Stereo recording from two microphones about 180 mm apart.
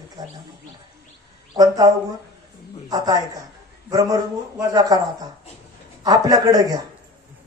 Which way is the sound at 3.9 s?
20° right (ahead or behind).